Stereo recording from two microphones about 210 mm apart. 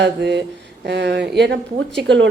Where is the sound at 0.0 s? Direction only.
55° right (ahead or behind).